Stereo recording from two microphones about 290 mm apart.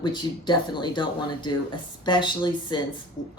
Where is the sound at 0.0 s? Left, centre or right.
Centre.